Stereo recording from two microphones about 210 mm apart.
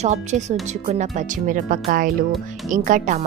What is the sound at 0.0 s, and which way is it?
Speech, 35° right (ahead or behind).